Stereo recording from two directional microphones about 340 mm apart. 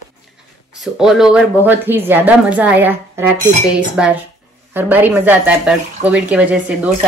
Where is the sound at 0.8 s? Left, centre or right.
Centre.